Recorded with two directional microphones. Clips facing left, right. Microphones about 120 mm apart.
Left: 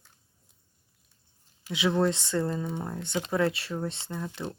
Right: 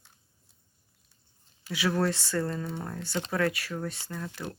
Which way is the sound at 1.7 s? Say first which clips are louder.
Left 2 dB; 20° left (ahead or behind).